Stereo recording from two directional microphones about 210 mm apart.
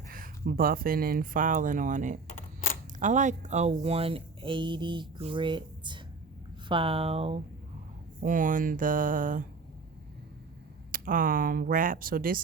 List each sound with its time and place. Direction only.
0.1 s speech: 45° right (ahead or behind); by 7.3 s 30° right (ahead or behind)
8.2 s speech: 40° right (ahead or behind)
10.9 s speech: 40° right (ahead or behind)